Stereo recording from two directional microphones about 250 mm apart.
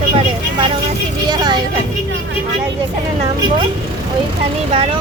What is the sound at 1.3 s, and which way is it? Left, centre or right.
Speech, centre.